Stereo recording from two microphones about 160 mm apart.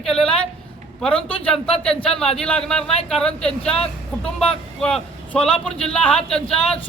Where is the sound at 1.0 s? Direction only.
5° left (ahead or behind).